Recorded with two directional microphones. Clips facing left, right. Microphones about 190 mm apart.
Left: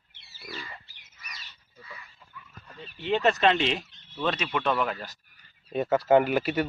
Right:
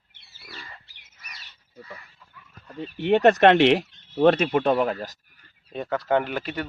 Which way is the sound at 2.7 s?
60° right (ahead or behind).